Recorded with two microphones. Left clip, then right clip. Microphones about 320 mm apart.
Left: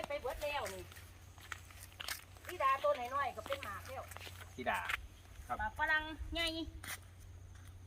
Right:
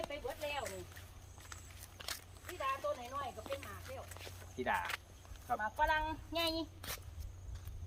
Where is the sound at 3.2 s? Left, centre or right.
Centre.